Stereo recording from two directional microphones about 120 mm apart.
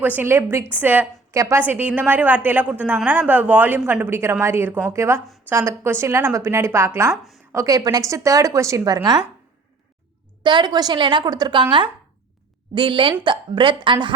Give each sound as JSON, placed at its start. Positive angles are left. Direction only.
{"t": 0.2, "sound": "a woman's voice", "side_deg": -20}
{"t": 10.4, "sound": "a woman's voice", "side_deg": -40}